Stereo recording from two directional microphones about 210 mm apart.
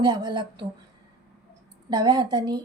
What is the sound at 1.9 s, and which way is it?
Speech, 20° right (ahead or behind).